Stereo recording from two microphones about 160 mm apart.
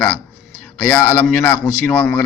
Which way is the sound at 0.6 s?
10° left (ahead or behind).